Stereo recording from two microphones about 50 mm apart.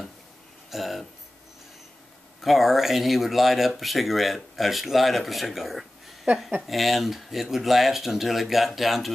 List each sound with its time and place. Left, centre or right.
0.7 s speech: centre
2.4 s speech: centre